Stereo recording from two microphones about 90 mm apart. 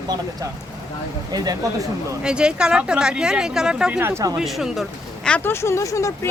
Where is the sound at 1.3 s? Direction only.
45° right (ahead or behind).